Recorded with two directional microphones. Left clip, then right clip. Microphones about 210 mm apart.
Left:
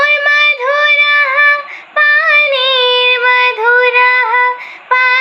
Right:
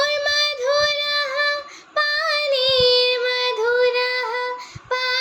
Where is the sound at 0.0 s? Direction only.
15° right (ahead or behind).